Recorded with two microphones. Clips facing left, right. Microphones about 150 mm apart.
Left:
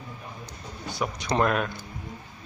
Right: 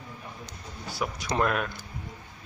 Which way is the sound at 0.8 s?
5° right (ahead or behind).